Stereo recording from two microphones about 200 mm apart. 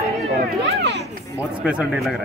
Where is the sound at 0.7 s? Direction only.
55° right (ahead or behind).